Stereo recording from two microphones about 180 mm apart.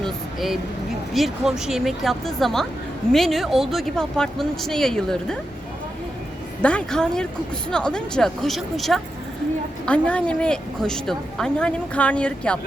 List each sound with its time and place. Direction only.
0.0 s a sound: centre (ahead or behind)
1.1 s speech: centre (ahead or behind)
6.6 s speech: 5° left (ahead or behind)